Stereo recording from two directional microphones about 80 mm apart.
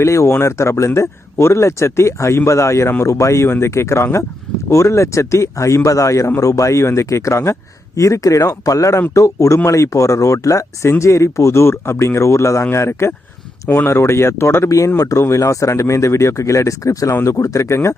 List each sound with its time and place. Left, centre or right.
0.0 s speech: left